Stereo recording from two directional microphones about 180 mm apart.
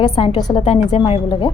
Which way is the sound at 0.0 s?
25° left (ahead or behind).